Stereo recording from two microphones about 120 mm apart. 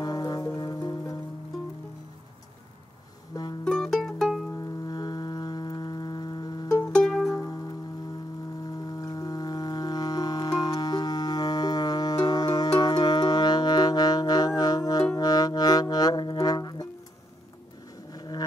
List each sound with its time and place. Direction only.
0.0 s music: 35° left (ahead or behind)
3.6 s music: 5° left (ahead or behind)
4.6 s music: 35° left (ahead or behind)
6.9 s music: 5° left (ahead or behind)
7.2 s music: 30° left (ahead or behind)
8.6 s music: 35° left (ahead or behind)
18.1 s a sound: 35° left (ahead or behind)